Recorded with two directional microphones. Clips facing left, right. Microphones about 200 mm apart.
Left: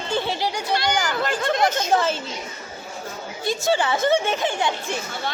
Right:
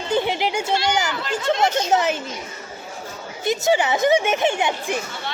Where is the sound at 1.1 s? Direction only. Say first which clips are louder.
Even; 50° left (ahead or behind).